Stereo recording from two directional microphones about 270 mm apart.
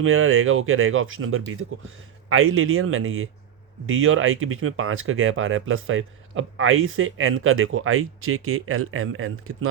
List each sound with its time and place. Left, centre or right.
0.0 s speech: right